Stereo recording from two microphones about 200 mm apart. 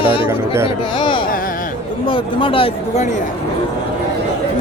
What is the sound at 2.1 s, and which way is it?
Speech, 25° left (ahead or behind).